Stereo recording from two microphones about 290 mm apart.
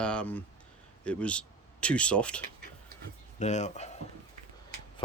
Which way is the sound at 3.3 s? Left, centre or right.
Left.